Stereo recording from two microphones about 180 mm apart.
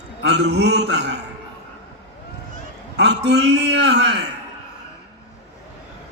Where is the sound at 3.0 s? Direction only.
70° right (ahead or behind).